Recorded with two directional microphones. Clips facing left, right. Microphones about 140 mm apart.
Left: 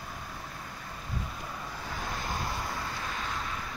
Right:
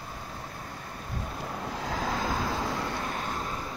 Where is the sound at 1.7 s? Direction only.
90° right.